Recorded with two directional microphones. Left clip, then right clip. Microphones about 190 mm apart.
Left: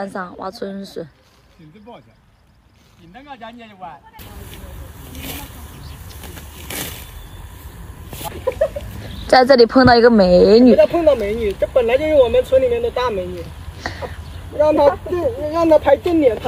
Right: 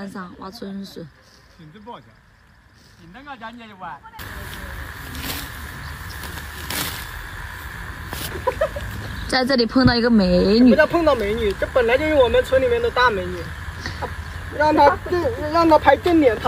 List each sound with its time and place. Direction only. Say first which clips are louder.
0.5 s speech: left 7 dB; 5° left (ahead or behind)
3.3 s speech: even; 5° right (ahead or behind)
5.0 s vehicle: right 1 dB; centre (ahead or behind)
6.8 s a sound: right 3 dB; centre (ahead or behind)
7.4 s vehicle: right 9 dB; 35° left (ahead or behind)
9.3 s speech: left 9 dB; 10° left (ahead or behind)
10.4 s speech: left 3 dB; 10° right (ahead or behind)
13.7 s a sound: left 5 dB; 10° left (ahead or behind)
14.6 s speech: left 1 dB; centre (ahead or behind)